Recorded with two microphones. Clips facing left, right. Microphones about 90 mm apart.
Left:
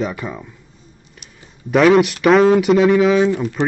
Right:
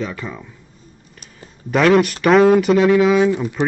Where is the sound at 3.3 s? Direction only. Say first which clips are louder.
Left 1 dB; 15° right (ahead or behind).